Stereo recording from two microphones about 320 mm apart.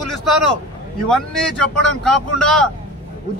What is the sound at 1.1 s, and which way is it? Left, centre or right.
Speech, centre.